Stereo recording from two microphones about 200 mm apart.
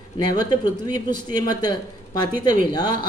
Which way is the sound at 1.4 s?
20° left (ahead or behind).